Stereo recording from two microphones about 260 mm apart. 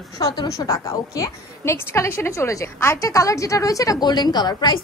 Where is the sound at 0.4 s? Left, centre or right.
Centre.